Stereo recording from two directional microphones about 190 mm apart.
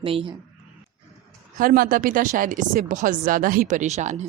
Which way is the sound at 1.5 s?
45° right (ahead or behind).